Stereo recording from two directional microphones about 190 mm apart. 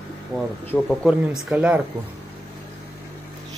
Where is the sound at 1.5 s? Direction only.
5° right (ahead or behind).